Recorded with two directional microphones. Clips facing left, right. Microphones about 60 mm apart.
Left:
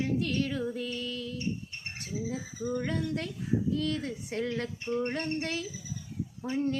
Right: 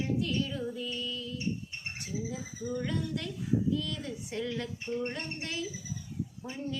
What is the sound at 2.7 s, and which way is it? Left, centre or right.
Speech, left.